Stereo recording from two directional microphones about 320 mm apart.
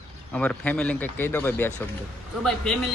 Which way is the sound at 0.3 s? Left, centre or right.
Centre.